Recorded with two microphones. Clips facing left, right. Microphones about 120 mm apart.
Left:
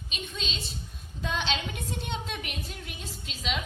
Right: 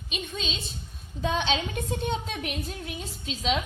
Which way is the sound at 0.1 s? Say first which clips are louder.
Right 5 dB; 50° right (ahead or behind).